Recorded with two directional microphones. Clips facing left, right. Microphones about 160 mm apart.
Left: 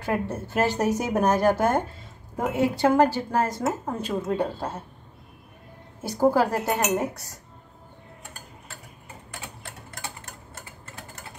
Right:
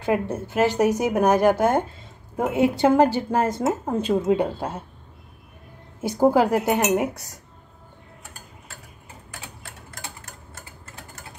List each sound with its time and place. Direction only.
0.0 s a woman's voice: 20° right (ahead or behind)
6.0 s a woman's voice: 20° right (ahead or behind)